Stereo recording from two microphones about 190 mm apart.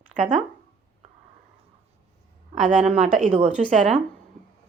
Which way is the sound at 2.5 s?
40° right (ahead or behind).